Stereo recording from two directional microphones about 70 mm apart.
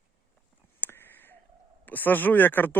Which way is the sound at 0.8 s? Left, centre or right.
Left.